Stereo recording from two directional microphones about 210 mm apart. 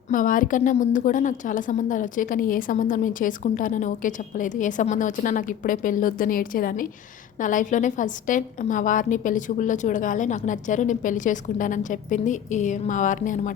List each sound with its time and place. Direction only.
0.1 s a woman's voice: 40° left (ahead or behind)